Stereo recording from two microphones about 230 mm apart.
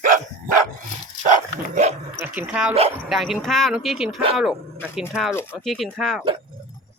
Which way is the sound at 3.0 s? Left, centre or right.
Centre.